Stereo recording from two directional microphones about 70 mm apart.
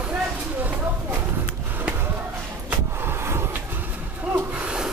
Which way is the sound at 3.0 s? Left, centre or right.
Right.